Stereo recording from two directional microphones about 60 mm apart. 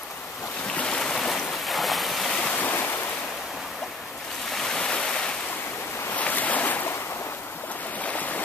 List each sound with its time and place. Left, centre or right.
0.7 s boat: centre
2.5 s waves: left
4.6 s waves: centre
6.1 s boat: left
8.0 s stream: left